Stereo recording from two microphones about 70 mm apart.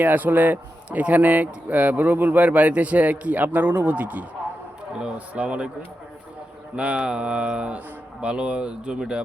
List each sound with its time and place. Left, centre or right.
0.0 s speech: right
6.7 s mantra: centre